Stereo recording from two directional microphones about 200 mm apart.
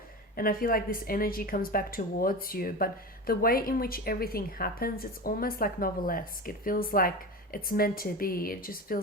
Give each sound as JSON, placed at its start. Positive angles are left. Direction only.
{"t": 0.3, "sound": "a woman's voice", "side_deg": 45}